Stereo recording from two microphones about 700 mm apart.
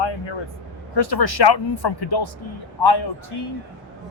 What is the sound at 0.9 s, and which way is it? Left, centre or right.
Speech, left.